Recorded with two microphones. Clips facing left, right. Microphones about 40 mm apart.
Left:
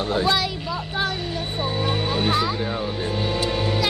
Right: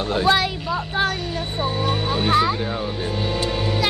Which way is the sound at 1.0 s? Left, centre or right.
Right.